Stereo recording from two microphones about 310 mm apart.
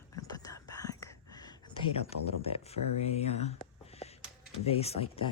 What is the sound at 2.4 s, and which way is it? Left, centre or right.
Speech, centre.